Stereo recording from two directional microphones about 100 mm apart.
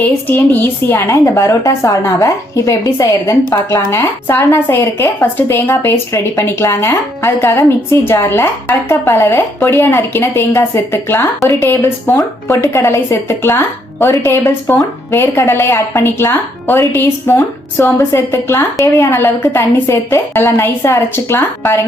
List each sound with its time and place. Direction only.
0.0 s a woman's voice: 20° left (ahead or behind)